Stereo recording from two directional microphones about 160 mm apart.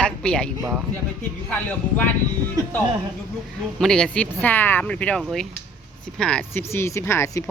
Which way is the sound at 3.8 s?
5° left (ahead or behind).